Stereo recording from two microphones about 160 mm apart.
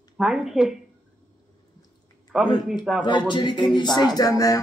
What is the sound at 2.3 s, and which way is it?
Speech, 5° right (ahead or behind).